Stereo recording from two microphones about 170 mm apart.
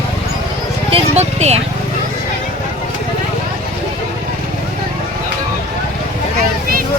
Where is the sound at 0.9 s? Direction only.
40° right (ahead or behind).